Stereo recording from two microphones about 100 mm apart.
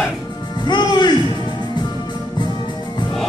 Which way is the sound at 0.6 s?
50° left (ahead or behind).